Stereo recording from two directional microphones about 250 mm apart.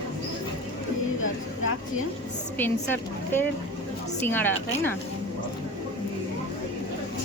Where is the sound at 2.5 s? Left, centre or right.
Centre.